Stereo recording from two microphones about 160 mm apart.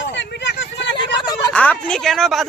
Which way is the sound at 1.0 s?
25° left (ahead or behind).